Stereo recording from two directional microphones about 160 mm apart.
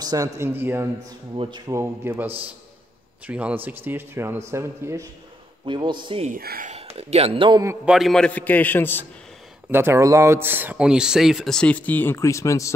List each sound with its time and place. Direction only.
0.0 s speech: 20° right (ahead or behind)
1.3 s a man's voice: 30° right (ahead or behind)
1.7 s speech: 15° right (ahead or behind)
5.7 s a man's voice: 30° right (ahead or behind)
6.2 s speech: 65° right (ahead or behind)
6.7 s speech: 40° right (ahead or behind)
7.8 s a man's voice: 5° right (ahead or behind); by 9.0 s 15° left (ahead or behind)
9.7 s speech: 15° right (ahead or behind); by 12.7 s 20° left (ahead or behind)